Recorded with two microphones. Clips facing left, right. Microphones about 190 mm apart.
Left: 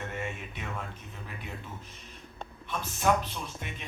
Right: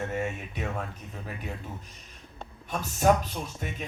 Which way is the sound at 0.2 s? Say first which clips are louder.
Right 5 dB; 45° right (ahead or behind).